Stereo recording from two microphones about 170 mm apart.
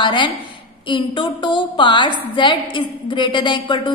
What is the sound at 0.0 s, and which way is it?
A woman's voice, 30° left (ahead or behind).